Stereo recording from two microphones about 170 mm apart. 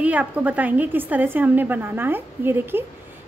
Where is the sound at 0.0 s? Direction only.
10° right (ahead or behind).